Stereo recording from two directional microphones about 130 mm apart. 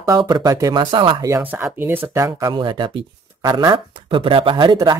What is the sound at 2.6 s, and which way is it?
Speech, 40° right (ahead or behind).